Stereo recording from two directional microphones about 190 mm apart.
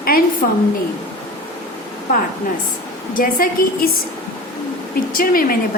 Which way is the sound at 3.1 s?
45° left (ahead or behind).